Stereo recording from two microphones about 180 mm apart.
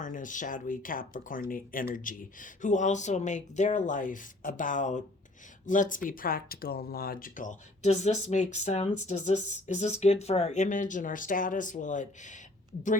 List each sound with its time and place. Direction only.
0.0 s speech: 45° left (ahead or behind)